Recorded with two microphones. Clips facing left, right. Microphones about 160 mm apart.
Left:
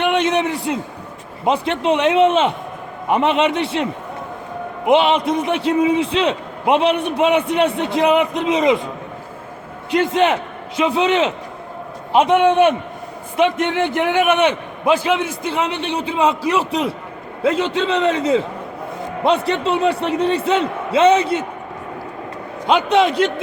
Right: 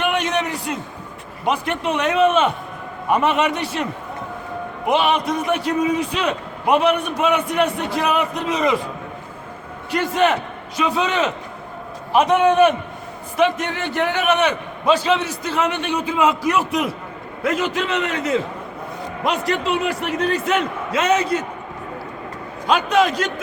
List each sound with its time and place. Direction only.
0.0 s a sound: 25° left (ahead or behind)
1.5 s a man's voice: 25° left (ahead or behind)
4.9 s a man's voice: 25° left (ahead or behind)
9.9 s a man's voice: 20° left (ahead or behind)
15.5 s a man's voice: 25° left (ahead or behind)
22.6 s a man's voice: 25° left (ahead or behind)